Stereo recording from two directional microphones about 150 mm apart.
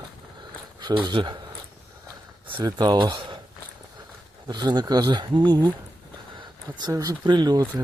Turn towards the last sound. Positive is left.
turn(degrees=-30)  # may be behind; listen again after turning